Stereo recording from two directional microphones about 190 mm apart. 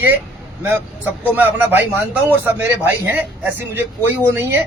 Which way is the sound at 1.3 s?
10° right (ahead or behind).